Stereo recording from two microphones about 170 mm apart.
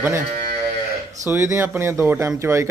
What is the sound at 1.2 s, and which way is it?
A man's voice, 15° right (ahead or behind).